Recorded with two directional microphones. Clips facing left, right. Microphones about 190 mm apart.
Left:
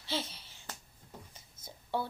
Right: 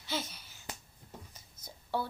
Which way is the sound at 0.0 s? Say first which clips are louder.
Left 1 dB; 30° left (ahead or behind).